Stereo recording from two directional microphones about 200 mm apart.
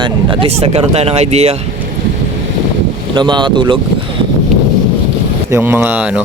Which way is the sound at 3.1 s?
20° right (ahead or behind).